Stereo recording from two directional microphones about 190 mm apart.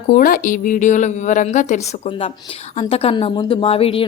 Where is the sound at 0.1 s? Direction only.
45° left (ahead or behind).